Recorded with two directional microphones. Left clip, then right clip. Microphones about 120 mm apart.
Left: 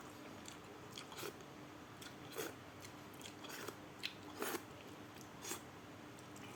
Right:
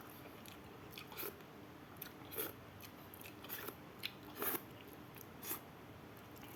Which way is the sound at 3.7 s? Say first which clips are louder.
Even; 15° right (ahead or behind).